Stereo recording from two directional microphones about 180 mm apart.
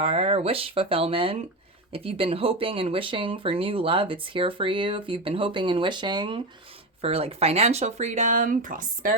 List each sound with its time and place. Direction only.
0.0 s speech: 35° right (ahead or behind); by 9.1 s 50° right (ahead or behind)